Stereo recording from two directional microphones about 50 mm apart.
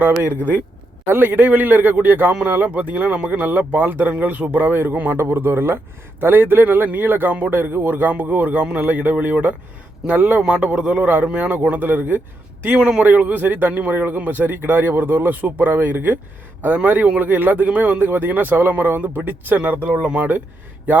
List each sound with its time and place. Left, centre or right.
0.0 s speech: right
3.5 s speech: right
8.1 s speech: right
12.6 s speech: right
17.2 s speech: right